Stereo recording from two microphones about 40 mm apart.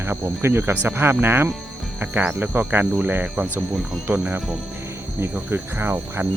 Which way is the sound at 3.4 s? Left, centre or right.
Right.